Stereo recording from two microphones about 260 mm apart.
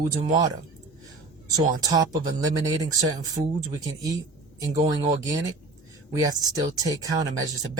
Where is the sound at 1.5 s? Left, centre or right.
Centre.